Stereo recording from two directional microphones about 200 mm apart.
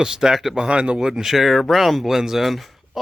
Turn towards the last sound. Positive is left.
turn(degrees=0)  # may be behind; listen again after turning